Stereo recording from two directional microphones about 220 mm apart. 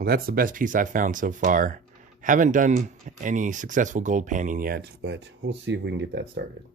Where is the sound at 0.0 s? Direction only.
45° right (ahead or behind).